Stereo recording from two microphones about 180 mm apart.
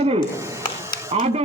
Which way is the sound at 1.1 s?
35° right (ahead or behind).